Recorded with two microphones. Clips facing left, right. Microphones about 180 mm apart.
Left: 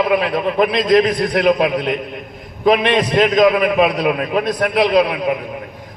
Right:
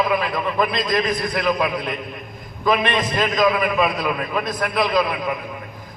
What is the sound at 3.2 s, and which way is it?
A man's voice, 30° left (ahead or behind).